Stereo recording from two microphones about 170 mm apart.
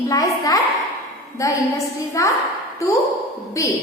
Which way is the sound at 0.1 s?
20° left (ahead or behind).